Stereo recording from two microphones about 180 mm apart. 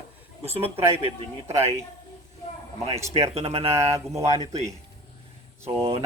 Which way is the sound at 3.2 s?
35° right (ahead or behind).